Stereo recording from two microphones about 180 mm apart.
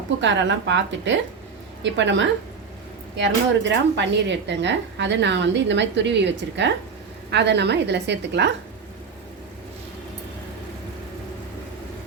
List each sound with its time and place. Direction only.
0.2 s a woman's voice: 90° right; by 8.5 s 70° right (ahead or behind)